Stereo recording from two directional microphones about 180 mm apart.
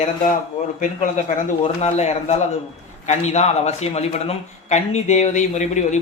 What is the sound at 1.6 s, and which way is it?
Speech, 35° left (ahead or behind).